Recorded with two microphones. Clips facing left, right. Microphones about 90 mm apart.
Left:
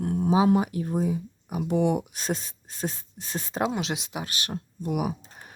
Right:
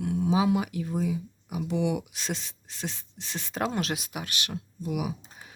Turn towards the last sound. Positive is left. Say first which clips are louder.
# left 3 dB
turn(degrees=45)  # may be behind; listen again after turning